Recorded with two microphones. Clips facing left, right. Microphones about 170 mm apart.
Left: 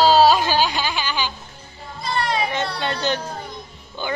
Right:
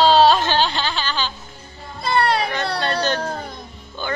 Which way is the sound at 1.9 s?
60° right (ahead or behind).